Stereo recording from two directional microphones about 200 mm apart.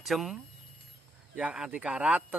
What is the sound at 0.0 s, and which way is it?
Speech, centre (ahead or behind).